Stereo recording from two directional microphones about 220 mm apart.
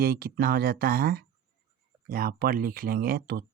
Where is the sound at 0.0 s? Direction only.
45° right (ahead or behind).